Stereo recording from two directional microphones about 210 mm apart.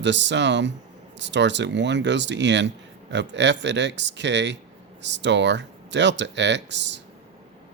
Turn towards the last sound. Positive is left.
turn(degrees=-55)  # may be behind; listen again after turning